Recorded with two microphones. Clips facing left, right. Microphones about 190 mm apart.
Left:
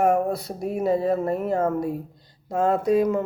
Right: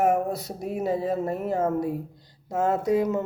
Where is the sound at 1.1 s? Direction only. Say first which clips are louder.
Left 3 dB; 20° right (ahead or behind).